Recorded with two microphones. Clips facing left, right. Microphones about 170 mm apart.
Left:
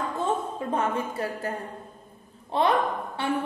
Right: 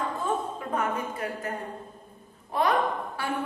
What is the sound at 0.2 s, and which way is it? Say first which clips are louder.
A woman's voice: left 2 dB; 30° left (ahead or behind).